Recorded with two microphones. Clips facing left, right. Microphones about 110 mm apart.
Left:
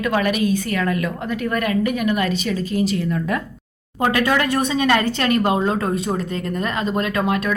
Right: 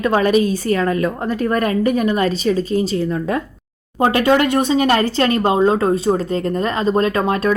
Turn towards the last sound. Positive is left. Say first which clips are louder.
# right 4 dB
turn(degrees=-35)  # may be behind; listen again after turning